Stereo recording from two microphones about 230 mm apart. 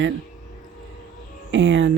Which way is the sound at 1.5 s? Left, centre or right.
Right.